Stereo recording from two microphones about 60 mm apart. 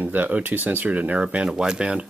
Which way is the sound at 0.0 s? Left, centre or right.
Right.